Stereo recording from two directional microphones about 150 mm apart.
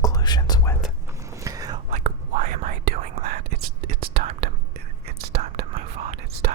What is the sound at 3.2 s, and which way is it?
Whispering, 85° right.